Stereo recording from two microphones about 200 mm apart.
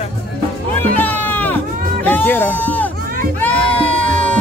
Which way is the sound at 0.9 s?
10° left (ahead or behind).